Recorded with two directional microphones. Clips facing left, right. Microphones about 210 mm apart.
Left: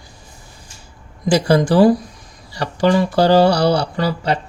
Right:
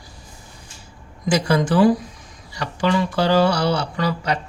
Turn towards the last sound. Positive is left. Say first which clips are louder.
# left 3 dB
turn(degrees=30)  # may be behind; listen again after turning